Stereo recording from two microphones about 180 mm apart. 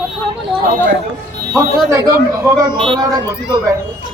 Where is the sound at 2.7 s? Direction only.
25° right (ahead or behind).